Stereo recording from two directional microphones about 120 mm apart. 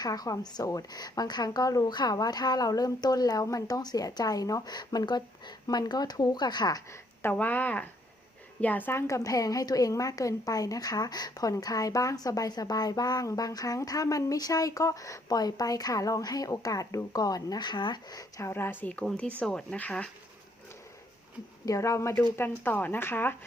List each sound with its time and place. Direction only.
0.0 s a woman's voice: 30° left (ahead or behind)
7.2 s a woman's voice: 15° left (ahead or behind)
21.7 s speech: 25° left (ahead or behind)